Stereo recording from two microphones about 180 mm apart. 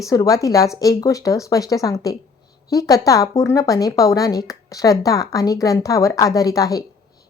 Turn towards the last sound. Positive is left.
turn(degrees=20)  # may be behind; listen again after turning